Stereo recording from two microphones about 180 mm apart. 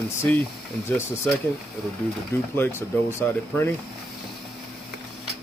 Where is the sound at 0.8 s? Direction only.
15° left (ahead or behind).